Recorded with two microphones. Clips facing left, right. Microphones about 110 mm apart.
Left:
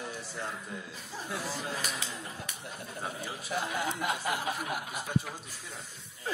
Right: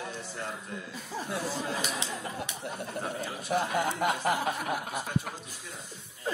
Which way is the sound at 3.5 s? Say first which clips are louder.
Right 5 dB; 50° right (ahead or behind).